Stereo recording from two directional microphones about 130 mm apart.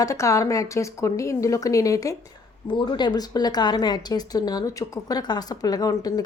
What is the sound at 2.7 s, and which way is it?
A woman's voice, 35° left (ahead or behind).